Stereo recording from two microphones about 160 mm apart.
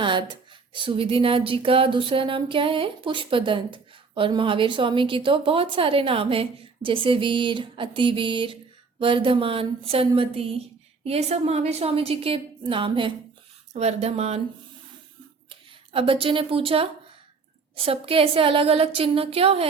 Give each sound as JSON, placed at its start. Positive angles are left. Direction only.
{"t": 0.0, "sound": "speech", "side_deg": -30}
{"t": 15.4, "sound": "speech", "side_deg": -35}